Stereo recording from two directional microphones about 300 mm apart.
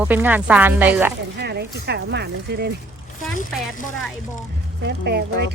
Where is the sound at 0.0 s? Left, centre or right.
Centre.